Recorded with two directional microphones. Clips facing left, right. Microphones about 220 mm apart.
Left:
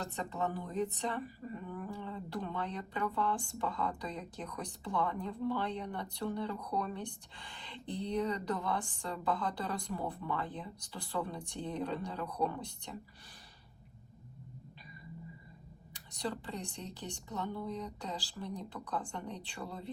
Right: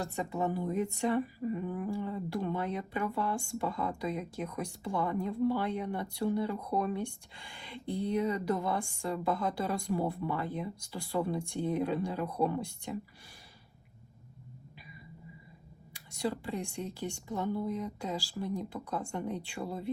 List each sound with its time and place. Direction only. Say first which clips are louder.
0.0 s speech: right 4 dB; 10° right (ahead or behind)
16.2 s speech: right 5 dB; 10° right (ahead or behind)